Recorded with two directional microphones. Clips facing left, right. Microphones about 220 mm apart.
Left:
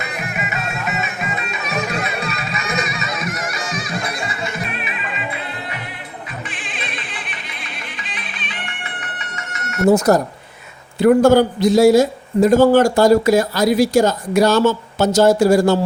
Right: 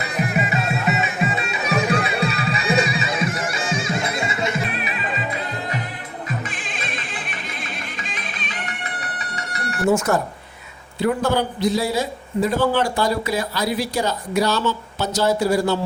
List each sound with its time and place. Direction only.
0.0 s music: 35° right (ahead or behind)
8.1 s music: 45° right (ahead or behind)
9.6 s a sound: 35° right (ahead or behind)
9.8 s a man's voice: 40° left (ahead or behind)